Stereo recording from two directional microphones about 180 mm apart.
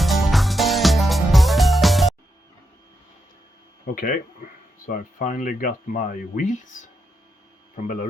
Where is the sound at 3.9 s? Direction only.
50° left (ahead or behind).